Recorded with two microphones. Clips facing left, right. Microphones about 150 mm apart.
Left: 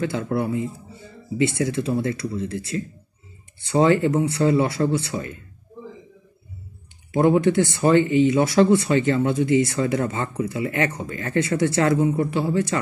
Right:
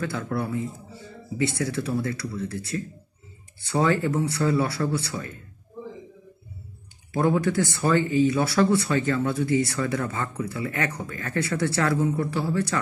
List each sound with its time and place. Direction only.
0.0 s speech: 25° left (ahead or behind)
7.1 s speech: 20° left (ahead or behind)